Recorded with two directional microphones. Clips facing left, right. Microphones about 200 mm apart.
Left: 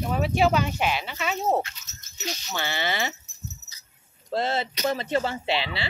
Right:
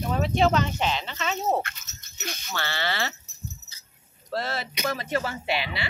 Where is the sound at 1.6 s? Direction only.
60° right (ahead or behind).